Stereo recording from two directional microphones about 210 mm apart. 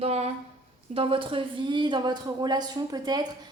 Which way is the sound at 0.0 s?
30° right (ahead or behind).